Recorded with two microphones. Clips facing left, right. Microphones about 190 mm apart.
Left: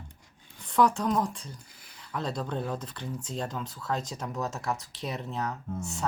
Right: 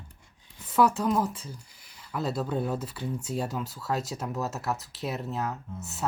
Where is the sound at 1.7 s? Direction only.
55° left (ahead or behind).